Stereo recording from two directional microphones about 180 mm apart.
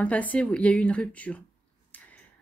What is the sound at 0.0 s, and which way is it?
Speech, 10° left (ahead or behind).